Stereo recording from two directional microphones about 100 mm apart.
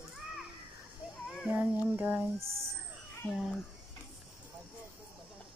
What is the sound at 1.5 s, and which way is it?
Speech, 20° right (ahead or behind).